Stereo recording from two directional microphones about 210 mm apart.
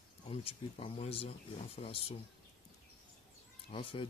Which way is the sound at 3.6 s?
25° left (ahead or behind).